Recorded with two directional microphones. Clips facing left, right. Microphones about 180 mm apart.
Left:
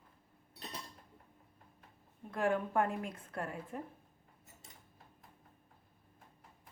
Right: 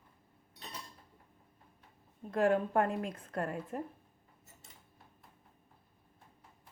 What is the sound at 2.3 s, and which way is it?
Speech, 40° right (ahead or behind).